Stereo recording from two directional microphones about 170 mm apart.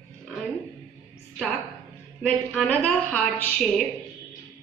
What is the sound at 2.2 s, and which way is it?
A woman's voice, 5° left (ahead or behind).